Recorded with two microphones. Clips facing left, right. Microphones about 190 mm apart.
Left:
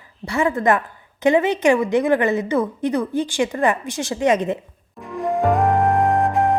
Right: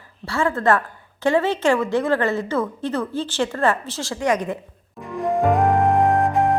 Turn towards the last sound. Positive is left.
turn(degrees=0)  # may be behind; listen again after turning